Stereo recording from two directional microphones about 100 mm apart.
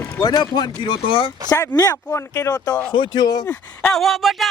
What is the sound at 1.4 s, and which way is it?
Speech, 40° left (ahead or behind).